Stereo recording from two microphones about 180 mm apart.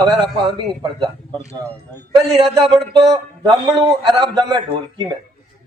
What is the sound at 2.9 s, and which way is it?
A man's voice, 25° right (ahead or behind).